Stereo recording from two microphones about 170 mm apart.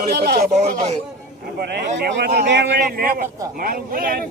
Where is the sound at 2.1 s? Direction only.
70° right (ahead or behind).